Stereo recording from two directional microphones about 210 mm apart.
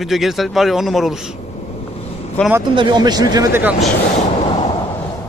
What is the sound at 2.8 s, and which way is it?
Speech, 20° right (ahead or behind).